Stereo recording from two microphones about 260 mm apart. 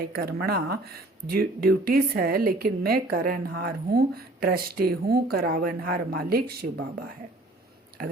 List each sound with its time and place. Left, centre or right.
0.0 s speech: right